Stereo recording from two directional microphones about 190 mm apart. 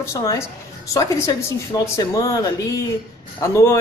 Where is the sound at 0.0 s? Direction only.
15° left (ahead or behind).